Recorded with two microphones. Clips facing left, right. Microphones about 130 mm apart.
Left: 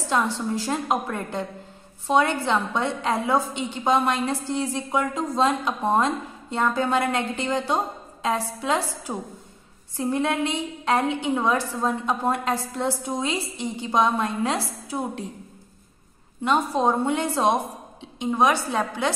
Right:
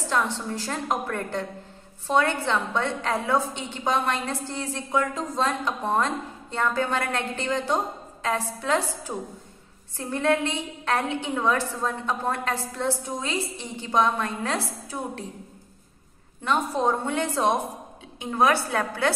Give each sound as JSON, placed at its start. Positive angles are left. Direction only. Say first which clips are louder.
{"t": 0.1, "sound": "a woman's voice", "louder": "left 3 dB", "side_deg": 15}
{"t": 16.4, "sound": "a woman's voice", "louder": "left 2 dB", "side_deg": 15}